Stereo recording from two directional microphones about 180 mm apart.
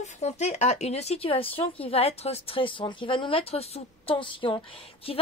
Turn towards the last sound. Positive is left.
turn(degrees=30)  # may be behind; listen again after turning